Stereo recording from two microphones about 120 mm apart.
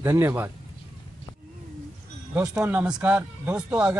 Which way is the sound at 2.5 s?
10° right (ahead or behind).